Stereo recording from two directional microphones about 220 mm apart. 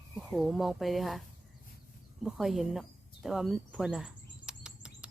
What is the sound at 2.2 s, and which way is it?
Speech, centre (ahead or behind).